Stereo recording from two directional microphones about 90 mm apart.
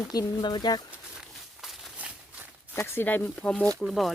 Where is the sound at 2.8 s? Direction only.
25° left (ahead or behind).